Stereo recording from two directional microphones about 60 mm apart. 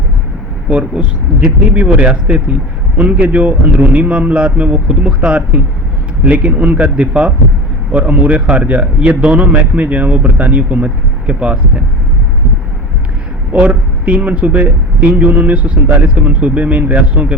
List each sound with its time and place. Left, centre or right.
0.7 s a man's voice: right
13.5 s a man's voice: right